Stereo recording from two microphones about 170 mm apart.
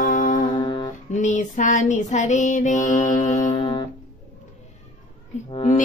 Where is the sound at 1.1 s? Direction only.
45° left (ahead or behind).